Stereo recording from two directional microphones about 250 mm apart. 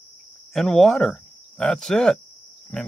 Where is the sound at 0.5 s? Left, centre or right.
Centre.